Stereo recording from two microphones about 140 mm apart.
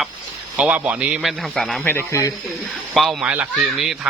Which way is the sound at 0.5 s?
10° right (ahead or behind).